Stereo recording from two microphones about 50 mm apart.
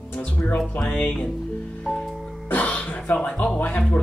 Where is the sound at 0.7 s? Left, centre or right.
Left.